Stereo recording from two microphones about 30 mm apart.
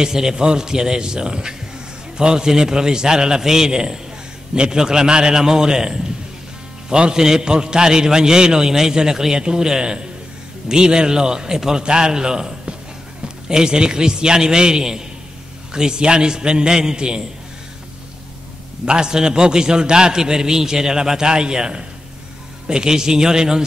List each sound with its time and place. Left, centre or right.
0.0 s a man's voice: right
18.9 s a man's voice: right